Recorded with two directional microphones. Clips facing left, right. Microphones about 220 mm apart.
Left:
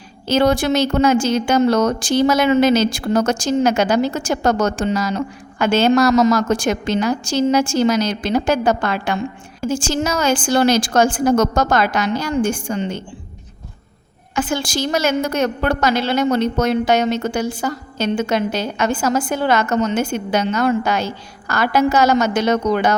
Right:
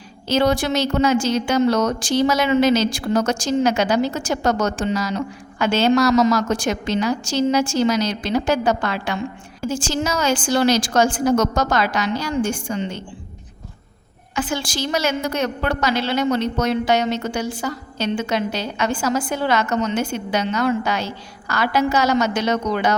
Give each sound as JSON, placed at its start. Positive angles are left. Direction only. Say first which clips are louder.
{"t": 0.3, "sound": "speech", "louder": "left 3 dB", "side_deg": 50}
{"t": 14.3, "sound": "speech", "louder": "left 3 dB", "side_deg": 45}